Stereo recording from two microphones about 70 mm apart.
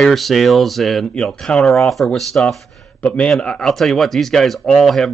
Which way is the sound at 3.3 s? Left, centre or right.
Centre.